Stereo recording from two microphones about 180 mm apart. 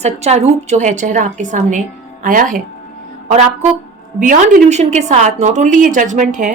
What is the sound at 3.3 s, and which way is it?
A woman's voice, 35° right (ahead or behind).